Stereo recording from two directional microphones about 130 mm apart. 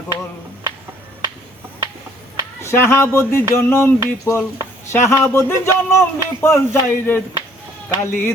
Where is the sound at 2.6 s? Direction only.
20° left (ahead or behind).